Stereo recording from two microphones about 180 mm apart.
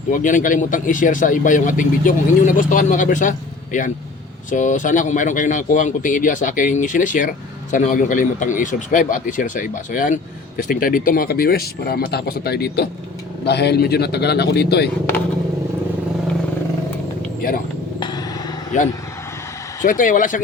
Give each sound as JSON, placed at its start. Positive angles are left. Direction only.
{"t": 0.1, "sound": "speech", "side_deg": 45}
{"t": 17.4, "sound": "speech", "side_deg": 50}
{"t": 18.7, "sound": "speech", "side_deg": 45}